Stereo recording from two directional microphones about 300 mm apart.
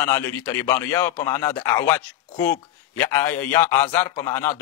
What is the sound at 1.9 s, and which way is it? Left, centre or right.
Speech, centre.